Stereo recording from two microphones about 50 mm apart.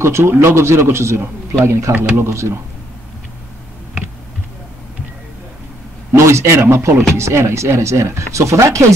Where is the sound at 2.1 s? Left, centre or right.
Right.